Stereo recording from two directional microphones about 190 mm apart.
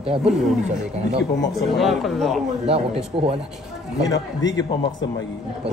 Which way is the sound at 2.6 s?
30° right (ahead or behind).